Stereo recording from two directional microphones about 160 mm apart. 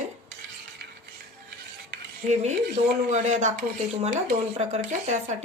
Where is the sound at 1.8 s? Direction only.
90° right.